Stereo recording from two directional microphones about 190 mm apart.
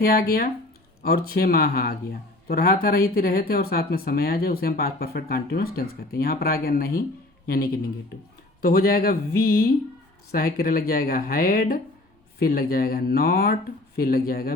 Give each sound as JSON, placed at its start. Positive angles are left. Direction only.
{"t": 0.0, "sound": "a man's voice", "side_deg": 50}